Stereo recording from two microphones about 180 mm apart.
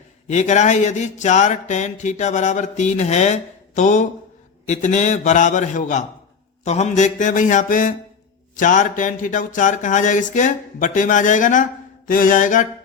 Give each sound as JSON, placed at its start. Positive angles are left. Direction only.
{"t": 0.3, "sound": "speech", "side_deg": 40}